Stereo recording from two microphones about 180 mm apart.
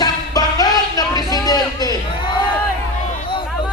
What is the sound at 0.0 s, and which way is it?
Music, 20° left (ahead or behind).